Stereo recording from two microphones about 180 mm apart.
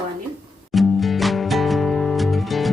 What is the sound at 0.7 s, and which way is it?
Music, centre (ahead or behind).